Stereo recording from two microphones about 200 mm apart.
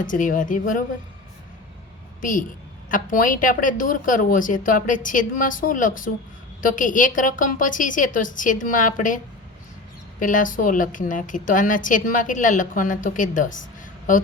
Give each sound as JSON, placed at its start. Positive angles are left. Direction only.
{"t": 0.0, "sound": "a woman's voice", "side_deg": 40}
{"t": 2.9, "sound": "a woman's voice", "side_deg": 40}